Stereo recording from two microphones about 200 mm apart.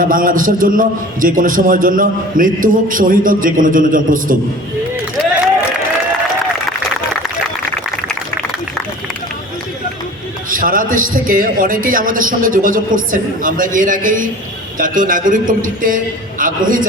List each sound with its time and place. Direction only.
0.0 s a man's voice: 45° right (ahead or behind)
10.5 s a man's voice: 45° right (ahead or behind)